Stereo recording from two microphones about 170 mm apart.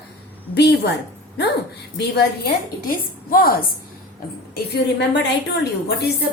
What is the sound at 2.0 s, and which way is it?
A woman's voice, 70° left (ahead or behind).